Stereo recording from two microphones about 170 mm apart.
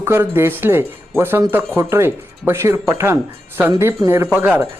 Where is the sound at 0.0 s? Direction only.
15° right (ahead or behind).